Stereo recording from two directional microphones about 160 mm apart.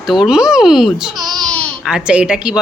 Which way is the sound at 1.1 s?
25° right (ahead or behind).